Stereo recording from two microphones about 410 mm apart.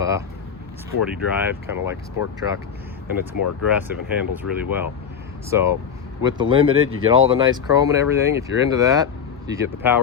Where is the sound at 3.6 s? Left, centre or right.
Centre.